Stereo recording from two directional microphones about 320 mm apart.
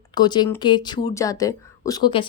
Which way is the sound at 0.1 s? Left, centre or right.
Centre.